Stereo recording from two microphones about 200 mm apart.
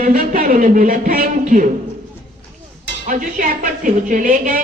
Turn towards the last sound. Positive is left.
turn(degrees=-40)  # may be behind; listen again after turning